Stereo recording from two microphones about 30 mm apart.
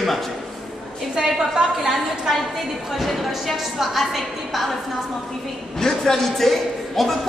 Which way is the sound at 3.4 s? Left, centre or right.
Centre.